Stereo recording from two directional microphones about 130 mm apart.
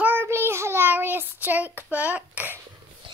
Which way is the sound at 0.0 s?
15° right (ahead or behind).